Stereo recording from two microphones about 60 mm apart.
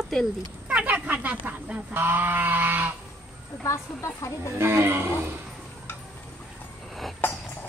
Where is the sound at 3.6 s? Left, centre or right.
Left.